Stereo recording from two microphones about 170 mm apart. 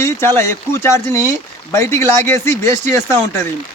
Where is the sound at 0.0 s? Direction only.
15° left (ahead or behind).